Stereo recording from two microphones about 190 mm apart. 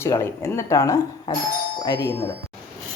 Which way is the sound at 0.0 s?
15° left (ahead or behind).